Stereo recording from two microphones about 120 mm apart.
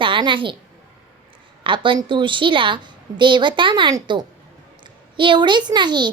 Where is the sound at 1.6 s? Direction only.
45° right (ahead or behind).